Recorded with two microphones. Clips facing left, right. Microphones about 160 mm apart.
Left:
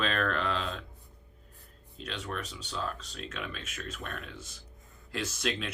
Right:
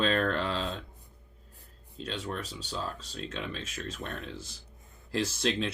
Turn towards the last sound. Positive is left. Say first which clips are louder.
# right 4 dB
turn(degrees=-30)  # may be behind; listen again after turning